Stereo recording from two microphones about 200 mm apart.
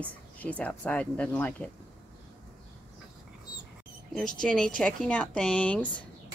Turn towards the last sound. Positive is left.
turn(degrees=5)  # may be behind; listen again after turning